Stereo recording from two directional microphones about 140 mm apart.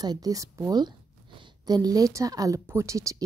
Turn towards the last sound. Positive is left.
turn(degrees=-20)  # may be behind; listen again after turning